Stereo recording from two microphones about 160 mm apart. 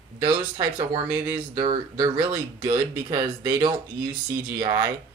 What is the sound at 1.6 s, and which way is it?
Speech, 35° right (ahead or behind).